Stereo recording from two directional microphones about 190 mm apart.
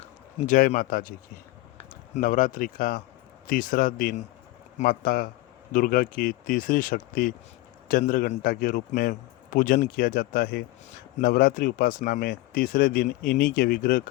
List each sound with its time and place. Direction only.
0.4 s speech: 45° left (ahead or behind)
2.1 s speech: 45° left (ahead or behind)